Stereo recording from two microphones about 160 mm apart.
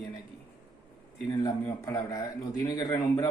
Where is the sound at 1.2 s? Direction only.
20° left (ahead or behind).